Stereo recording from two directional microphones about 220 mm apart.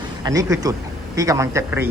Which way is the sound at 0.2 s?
15° right (ahead or behind).